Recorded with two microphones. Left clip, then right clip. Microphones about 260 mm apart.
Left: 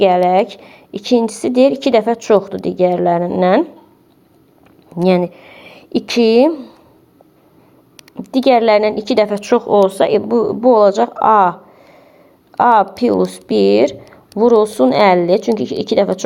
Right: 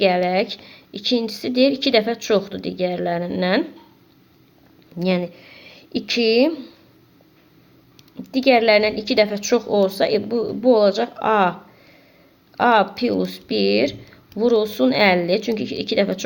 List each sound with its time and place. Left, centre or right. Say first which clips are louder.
0.0 s a woman's voice: left 7 dB; centre
4.9 s speech: left 8 dB; centre
8.1 s a woman's voice: left 4 dB; centre
12.5 s a woman's voice: left 5 dB; centre